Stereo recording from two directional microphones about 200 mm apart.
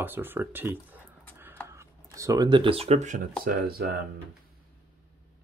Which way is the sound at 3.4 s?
50° right (ahead or behind).